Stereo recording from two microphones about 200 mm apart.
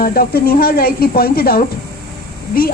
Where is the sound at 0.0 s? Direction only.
45° left (ahead or behind).